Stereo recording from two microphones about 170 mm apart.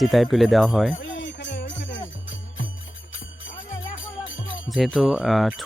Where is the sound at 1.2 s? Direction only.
90° left.